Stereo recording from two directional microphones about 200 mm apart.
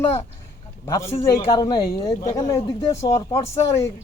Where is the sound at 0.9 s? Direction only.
15° left (ahead or behind).